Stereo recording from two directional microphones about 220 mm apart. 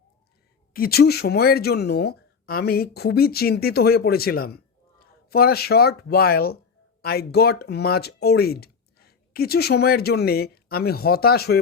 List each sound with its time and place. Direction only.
0.7 s speech: 45° left (ahead or behind)